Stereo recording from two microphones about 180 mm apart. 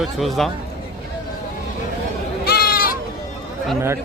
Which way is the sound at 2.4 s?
55° left (ahead or behind).